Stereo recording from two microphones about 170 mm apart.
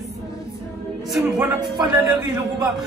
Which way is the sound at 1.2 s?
10° right (ahead or behind).